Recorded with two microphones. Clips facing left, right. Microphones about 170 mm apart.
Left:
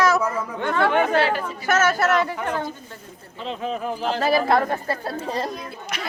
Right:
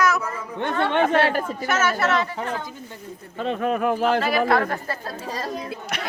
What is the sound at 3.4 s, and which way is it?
Speech, 55° right (ahead or behind).